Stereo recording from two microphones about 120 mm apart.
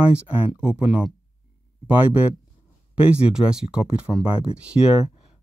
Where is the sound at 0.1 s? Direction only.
10° right (ahead or behind).